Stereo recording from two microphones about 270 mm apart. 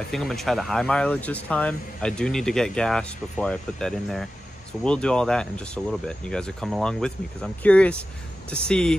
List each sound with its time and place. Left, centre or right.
0.1 s speech: centre